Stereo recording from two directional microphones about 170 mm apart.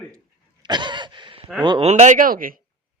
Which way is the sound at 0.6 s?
25° right (ahead or behind).